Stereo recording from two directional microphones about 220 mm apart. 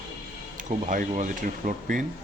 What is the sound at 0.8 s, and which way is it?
Speech, 35° right (ahead or behind).